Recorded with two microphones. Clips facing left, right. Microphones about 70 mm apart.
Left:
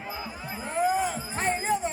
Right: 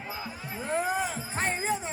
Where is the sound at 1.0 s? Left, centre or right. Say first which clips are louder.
Left 2 dB; centre.